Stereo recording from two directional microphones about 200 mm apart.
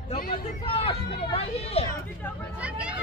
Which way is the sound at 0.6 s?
30° left (ahead or behind).